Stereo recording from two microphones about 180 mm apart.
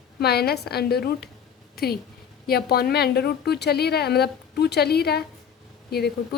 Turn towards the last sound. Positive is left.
turn(degrees=60)  # may be behind; listen again after turning